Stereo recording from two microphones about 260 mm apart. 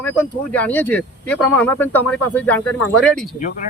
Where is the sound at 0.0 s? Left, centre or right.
Centre.